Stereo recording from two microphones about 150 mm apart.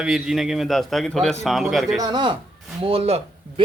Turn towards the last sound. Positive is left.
turn(degrees=-40)  # may be behind; listen again after turning